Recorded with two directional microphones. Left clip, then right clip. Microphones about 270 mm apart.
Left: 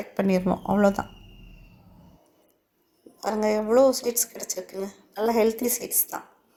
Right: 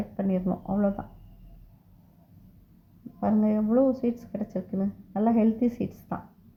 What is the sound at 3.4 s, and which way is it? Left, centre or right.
Speech, left.